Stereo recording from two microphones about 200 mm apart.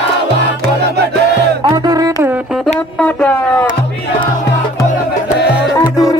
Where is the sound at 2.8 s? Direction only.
5° left (ahead or behind).